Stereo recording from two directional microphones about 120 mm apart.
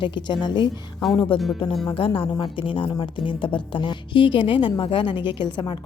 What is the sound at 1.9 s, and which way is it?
A woman's voice, 50° left (ahead or behind).